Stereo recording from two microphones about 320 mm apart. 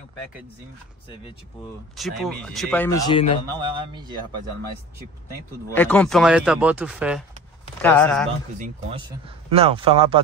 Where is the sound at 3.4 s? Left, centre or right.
Centre.